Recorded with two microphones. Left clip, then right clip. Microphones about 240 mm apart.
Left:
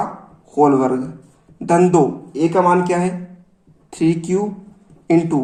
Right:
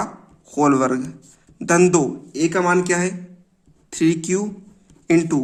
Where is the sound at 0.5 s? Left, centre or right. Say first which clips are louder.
Left 3 dB; right.